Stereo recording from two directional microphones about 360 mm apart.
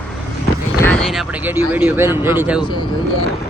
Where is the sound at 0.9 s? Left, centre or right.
Centre.